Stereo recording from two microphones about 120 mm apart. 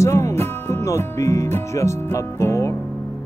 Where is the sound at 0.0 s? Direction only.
25° left (ahead or behind).